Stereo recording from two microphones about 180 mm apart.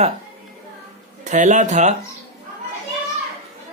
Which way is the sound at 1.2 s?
40° right (ahead or behind).